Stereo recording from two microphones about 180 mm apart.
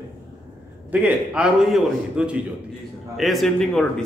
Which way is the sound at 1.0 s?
5° right (ahead or behind).